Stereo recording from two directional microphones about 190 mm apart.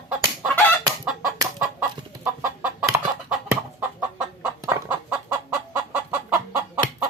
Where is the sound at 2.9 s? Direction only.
15° right (ahead or behind).